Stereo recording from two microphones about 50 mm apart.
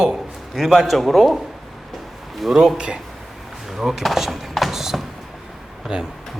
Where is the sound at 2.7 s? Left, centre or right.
Centre.